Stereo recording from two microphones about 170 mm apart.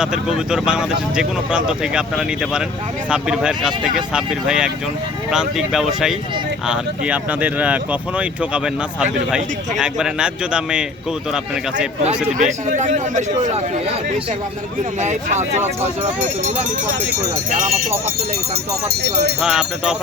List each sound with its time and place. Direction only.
0.0 s speech: 5° right (ahead or behind)
12.0 s speech: 45° right (ahead or behind)
15.0 s speech: 45° right (ahead or behind)
19.4 s speech: 5° right (ahead or behind)